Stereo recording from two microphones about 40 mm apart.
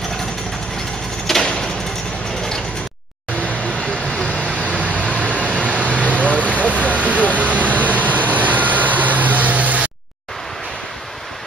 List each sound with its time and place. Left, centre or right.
1.2 s a sound: centre
3.3 s vehicle: left
4.6 s vehicle: right